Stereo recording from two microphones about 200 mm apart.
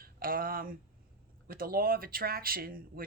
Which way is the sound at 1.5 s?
45° right (ahead or behind).